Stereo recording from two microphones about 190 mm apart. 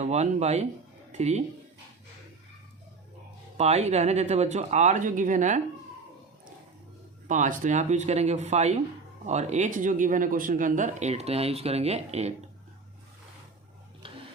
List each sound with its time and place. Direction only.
0.0 s speech: 35° right (ahead or behind)
3.6 s speech: 35° right (ahead or behind)
7.3 s speech: 40° right (ahead or behind)